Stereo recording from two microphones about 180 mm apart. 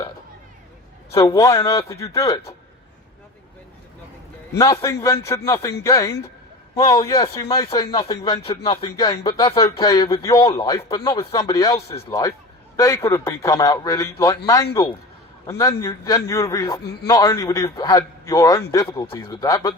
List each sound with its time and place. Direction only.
1.1 s a man's voice: 20° left (ahead or behind)
4.5 s a man's voice: 20° left (ahead or behind)
16.8 s a man's voice: 65° left (ahead or behind)
17.1 s a man's voice: 20° left (ahead or behind)